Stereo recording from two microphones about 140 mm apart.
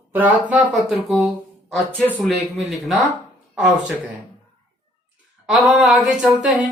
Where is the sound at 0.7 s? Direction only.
Centre (ahead or behind).